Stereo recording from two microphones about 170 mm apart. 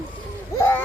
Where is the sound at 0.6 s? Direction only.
15° left (ahead or behind).